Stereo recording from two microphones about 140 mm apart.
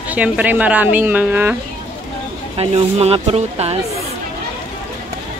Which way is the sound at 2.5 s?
45° right (ahead or behind).